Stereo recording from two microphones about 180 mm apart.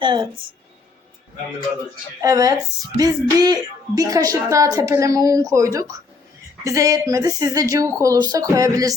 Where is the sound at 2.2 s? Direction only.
20° right (ahead or behind).